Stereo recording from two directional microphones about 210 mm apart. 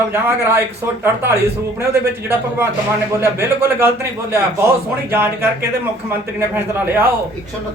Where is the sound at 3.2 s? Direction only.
10° right (ahead or behind).